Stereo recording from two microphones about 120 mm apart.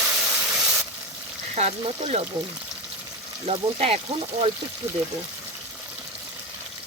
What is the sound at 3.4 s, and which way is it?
Speech, 60° right (ahead or behind).